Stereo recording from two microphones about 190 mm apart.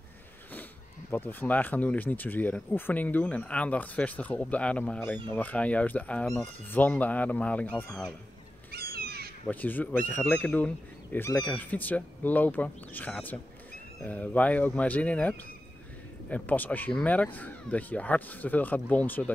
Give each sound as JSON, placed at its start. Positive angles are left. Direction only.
{"t": 1.1, "sound": "speech", "side_deg": 10}
{"t": 8.7, "sound": "crow", "side_deg": -55}
{"t": 9.5, "sound": "speech", "side_deg": 10}